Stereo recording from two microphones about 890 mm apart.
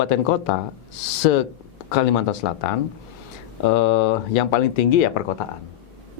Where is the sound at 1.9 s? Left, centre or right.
Left.